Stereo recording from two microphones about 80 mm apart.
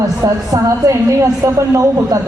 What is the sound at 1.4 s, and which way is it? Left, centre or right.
Speech, right.